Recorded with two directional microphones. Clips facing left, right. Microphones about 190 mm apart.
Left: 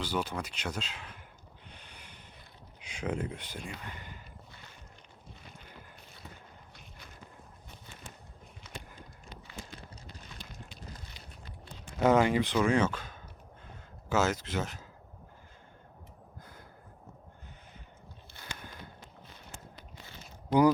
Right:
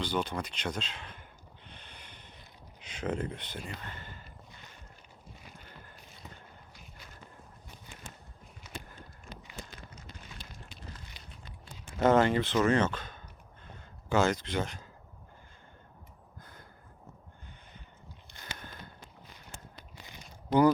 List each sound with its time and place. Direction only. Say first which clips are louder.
0.0 s speech: right 1 dB; 5° left (ahead or behind)
1.7 s snort: right 1 dB; 10° left (ahead or behind)
2.8 s speech: right 1 dB; 10° left (ahead or behind)
9.9 s a sound: even; 35° left (ahead or behind)
11.9 s speech: even; 10° left (ahead or behind)
13.7 s a sound: right 1 dB; 5° left (ahead or behind)